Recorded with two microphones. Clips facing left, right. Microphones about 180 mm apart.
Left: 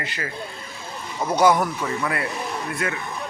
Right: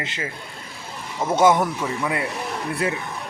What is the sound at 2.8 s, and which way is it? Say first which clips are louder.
Speech: right 4 dB; 30° right (ahead or behind).